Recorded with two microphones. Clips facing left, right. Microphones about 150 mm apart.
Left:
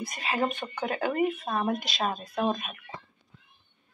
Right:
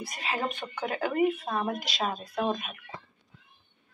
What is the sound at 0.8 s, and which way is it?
Speech, 10° right (ahead or behind).